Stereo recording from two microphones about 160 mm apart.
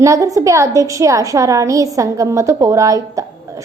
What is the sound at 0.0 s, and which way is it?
A woman's voice, 20° right (ahead or behind).